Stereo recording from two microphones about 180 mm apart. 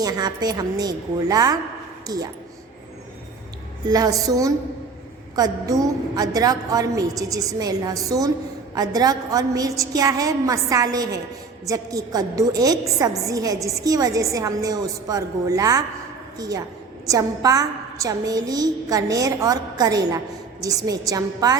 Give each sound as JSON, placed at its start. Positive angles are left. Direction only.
{"t": 0.0, "sound": "a woman's voice", "side_deg": -20}
{"t": 3.8, "sound": "a woman's voice", "side_deg": -20}